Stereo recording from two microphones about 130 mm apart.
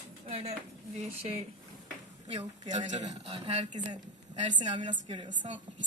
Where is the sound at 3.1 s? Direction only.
50° right (ahead or behind).